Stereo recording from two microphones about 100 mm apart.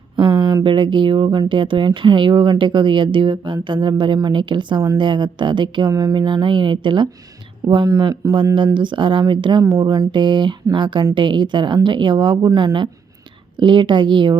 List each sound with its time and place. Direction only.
0.2 s speech: 50° right (ahead or behind)
5.9 s speech: 35° right (ahead or behind)
6.1 s speech: 50° right (ahead or behind)
7.9 s speech: 40° right (ahead or behind)
8.5 s speech: 55° right (ahead or behind)